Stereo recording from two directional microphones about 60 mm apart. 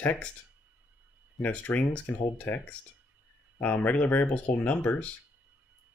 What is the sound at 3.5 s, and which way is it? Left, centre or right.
Speech, left.